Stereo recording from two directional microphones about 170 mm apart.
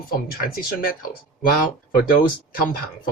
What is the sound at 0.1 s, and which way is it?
Speech, 60° left (ahead or behind).